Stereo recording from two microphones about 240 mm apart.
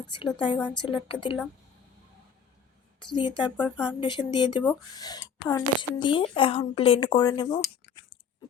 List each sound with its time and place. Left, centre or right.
0.3 s a woman's voice: centre
3.2 s a woman's voice: centre